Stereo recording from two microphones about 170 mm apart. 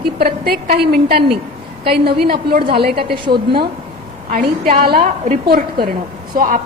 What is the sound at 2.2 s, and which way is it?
Speech, 65° right (ahead or behind).